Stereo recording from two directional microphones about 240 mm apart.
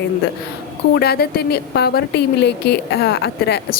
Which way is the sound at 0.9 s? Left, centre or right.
Left.